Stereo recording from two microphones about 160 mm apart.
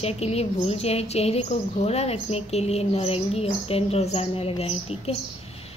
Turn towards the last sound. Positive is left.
turn(degrees=40)  # may be behind; listen again after turning